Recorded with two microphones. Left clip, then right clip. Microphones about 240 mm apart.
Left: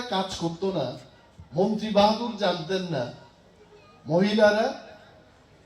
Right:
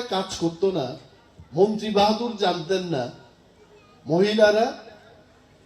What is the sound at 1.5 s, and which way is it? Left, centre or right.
A man's voice, right.